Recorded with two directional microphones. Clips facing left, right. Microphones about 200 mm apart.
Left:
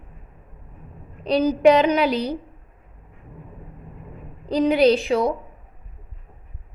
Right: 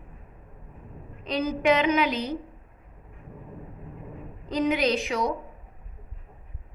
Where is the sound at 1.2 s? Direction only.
35° left (ahead or behind).